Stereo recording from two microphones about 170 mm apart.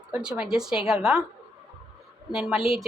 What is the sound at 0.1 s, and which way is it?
A woman's voice, 5° right (ahead or behind).